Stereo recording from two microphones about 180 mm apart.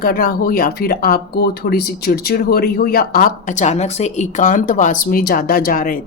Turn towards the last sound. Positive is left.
turn(degrees=50)  # may be behind; listen again after turning